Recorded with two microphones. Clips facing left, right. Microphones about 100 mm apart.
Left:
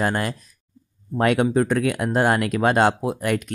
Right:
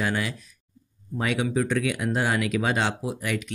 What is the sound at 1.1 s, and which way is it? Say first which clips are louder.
Speech: left 7 dB; 55° left (ahead or behind).